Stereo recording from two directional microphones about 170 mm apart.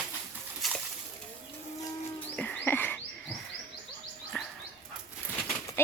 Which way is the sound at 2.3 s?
10° left (ahead or behind).